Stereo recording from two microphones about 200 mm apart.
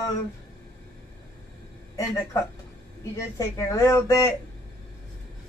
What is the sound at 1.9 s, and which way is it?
Speech, 15° left (ahead or behind).